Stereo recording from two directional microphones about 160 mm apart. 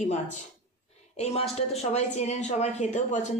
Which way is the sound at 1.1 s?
40° left (ahead or behind).